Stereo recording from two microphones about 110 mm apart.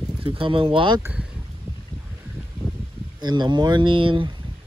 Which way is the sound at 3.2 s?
40° right (ahead or behind).